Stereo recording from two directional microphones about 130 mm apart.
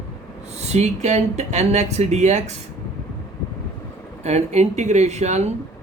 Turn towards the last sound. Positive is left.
turn(degrees=-60)  # may be behind; listen again after turning